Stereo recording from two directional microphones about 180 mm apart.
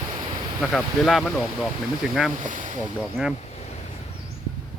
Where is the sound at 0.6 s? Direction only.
5° left (ahead or behind).